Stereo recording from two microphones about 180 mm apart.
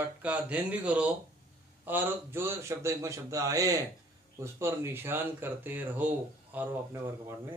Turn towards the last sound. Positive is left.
turn(degrees=-15)  # may be behind; listen again after turning